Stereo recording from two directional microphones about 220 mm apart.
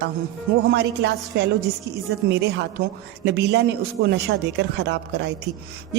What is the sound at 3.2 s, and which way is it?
A woman's voice, 50° right (ahead or behind).